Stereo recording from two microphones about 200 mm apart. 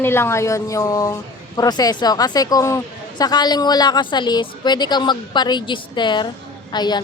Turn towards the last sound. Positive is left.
turn(degrees=20)  # may be behind; listen again after turning